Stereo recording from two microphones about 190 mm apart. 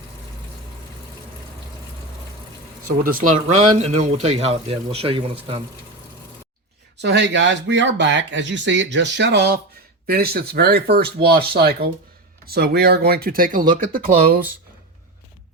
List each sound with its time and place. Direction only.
3.0 s speech: 50° right (ahead or behind); by 5.6 s 30° right (ahead or behind)
7.0 s speech: 65° right (ahead or behind); by 14.4 s 50° right (ahead or behind)